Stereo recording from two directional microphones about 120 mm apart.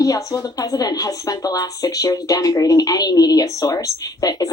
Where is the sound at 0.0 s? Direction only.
30° left (ahead or behind).